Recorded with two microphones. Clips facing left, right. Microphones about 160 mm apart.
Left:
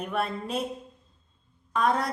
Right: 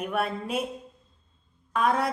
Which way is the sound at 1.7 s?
10° right (ahead or behind).